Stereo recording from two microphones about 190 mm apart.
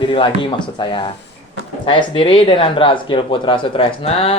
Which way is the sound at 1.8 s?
25° left (ahead or behind).